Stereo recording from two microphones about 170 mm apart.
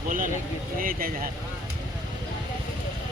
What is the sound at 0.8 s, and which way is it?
Speech, 55° right (ahead or behind).